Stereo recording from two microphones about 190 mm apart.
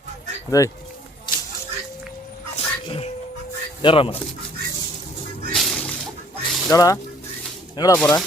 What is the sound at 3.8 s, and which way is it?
Speech, 30° left (ahead or behind).